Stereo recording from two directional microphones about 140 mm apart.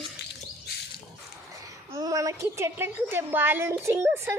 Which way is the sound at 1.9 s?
25° right (ahead or behind).